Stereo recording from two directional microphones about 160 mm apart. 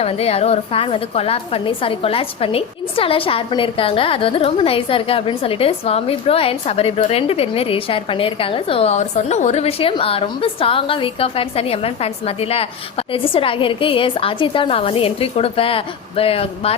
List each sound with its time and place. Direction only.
0.0 s a woman's voice: 40° left (ahead or behind)